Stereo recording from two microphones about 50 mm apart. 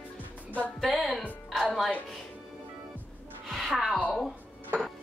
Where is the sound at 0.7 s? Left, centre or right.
Centre.